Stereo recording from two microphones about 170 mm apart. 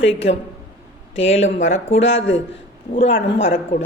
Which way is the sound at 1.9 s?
90° left.